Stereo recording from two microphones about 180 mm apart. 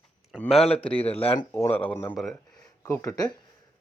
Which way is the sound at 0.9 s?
35° left (ahead or behind).